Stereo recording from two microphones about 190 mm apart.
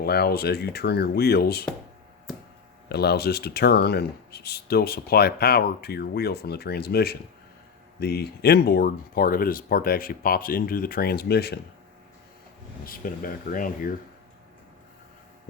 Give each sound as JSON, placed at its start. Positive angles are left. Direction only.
{"t": 0.0, "sound": "speech", "side_deg": 55}
{"t": 2.9, "sound": "speech", "side_deg": 60}
{"t": 12.8, "sound": "speech", "side_deg": 50}